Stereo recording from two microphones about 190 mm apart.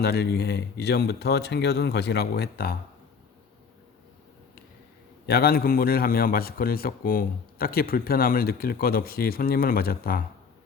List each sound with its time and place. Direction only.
0.0 s speech: 55° left (ahead or behind)
5.2 s a man's voice: 55° left (ahead or behind)